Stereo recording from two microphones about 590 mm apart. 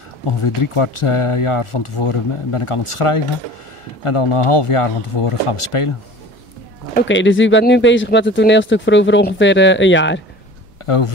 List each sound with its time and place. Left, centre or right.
0.4 s speech: left
6.9 s speech: centre
10.8 s a sound: left